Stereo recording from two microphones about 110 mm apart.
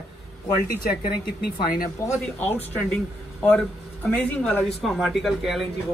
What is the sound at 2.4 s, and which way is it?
Speech, 15° left (ahead or behind).